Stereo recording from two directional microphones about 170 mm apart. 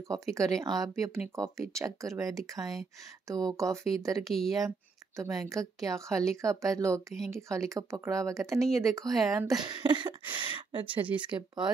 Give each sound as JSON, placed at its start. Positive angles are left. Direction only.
{"t": 0.1, "sound": "a woman's voice", "side_deg": -20}
{"t": 4.2, "sound": "speech", "side_deg": 0}
{"t": 4.6, "sound": "a woman's voice", "side_deg": -15}
{"t": 8.5, "sound": "speech", "side_deg": 0}
{"t": 8.8, "sound": "a woman's voice", "side_deg": -20}
{"t": 10.9, "sound": "speech", "side_deg": -10}
{"t": 11.1, "sound": "a woman's voice", "side_deg": -25}